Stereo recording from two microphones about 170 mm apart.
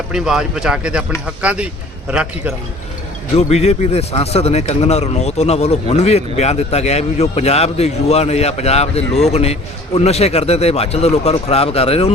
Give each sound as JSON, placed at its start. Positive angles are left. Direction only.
{"t": 0.1, "sound": "a man's voice", "side_deg": -5}
{"t": 3.3, "sound": "a man's voice", "side_deg": 40}